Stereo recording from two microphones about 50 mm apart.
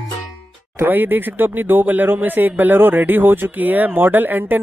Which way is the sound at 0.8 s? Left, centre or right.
Right.